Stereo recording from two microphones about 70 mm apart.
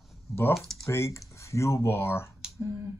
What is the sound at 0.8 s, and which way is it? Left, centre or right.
Speech, left.